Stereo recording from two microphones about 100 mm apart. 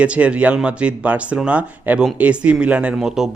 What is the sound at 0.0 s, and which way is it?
Speech, 10° right (ahead or behind).